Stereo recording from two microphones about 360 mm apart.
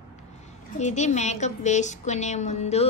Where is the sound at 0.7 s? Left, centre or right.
Centre.